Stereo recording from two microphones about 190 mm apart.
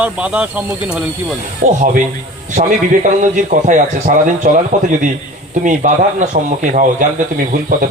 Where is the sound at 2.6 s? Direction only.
40° right (ahead or behind).